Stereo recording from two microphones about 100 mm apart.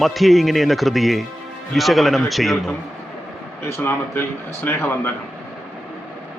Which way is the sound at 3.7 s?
25° left (ahead or behind).